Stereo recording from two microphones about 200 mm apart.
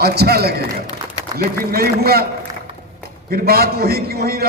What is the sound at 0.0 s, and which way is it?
A man's voice, 50° right (ahead or behind).